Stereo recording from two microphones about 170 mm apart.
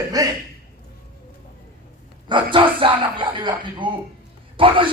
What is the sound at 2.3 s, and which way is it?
Speech, 30° right (ahead or behind).